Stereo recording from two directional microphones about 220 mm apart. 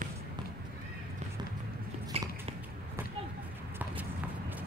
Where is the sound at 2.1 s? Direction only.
25° right (ahead or behind).